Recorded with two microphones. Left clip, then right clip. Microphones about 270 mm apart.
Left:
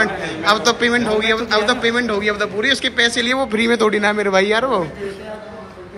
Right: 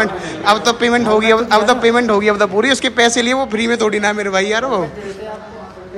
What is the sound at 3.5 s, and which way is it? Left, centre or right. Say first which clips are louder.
A man's voice: even; centre.